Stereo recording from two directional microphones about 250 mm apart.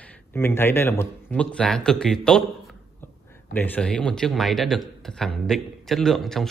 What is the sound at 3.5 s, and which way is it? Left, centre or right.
A man's voice, centre.